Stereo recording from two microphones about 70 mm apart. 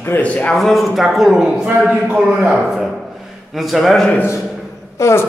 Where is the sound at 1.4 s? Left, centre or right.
Centre.